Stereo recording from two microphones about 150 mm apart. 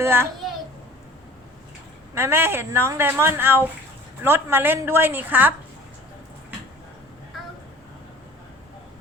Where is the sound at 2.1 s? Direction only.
15° right (ahead or behind).